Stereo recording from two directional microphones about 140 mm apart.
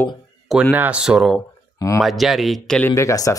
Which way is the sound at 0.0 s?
Centre (ahead or behind).